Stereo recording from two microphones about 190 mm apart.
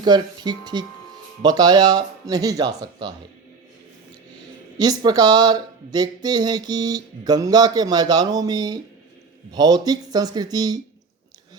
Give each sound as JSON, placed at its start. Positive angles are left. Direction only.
{"t": 0.0, "sound": "speech", "side_deg": -20}
{"t": 4.8, "sound": "speech", "side_deg": -20}